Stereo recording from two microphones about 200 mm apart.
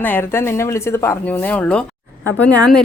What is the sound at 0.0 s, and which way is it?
Speech, 10° left (ahead or behind).